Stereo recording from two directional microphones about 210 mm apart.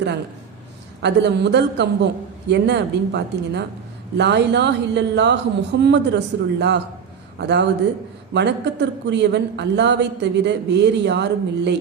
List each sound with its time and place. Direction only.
1.0 s a woman's voice: 55° right (ahead or behind)